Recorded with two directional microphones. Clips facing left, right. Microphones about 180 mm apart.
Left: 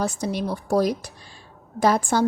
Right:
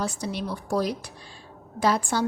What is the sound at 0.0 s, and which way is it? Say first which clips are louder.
A woman's voice: left 4 dB; 45° left (ahead or behind).